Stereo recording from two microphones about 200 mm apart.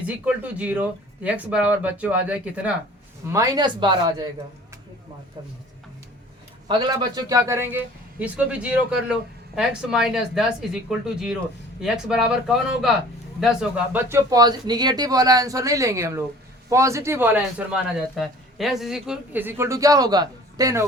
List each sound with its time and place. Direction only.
0.0 s a man's voice: 5° right (ahead or behind); by 4.3 s 20° right (ahead or behind)
6.7 s a man's voice: 20° right (ahead or behind)